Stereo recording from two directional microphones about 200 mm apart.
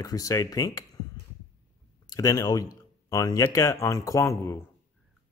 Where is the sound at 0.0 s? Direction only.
15° left (ahead or behind).